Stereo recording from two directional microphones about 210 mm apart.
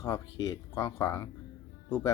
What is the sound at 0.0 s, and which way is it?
Speech, 15° left (ahead or behind).